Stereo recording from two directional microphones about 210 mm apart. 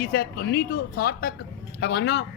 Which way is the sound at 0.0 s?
50° left (ahead or behind).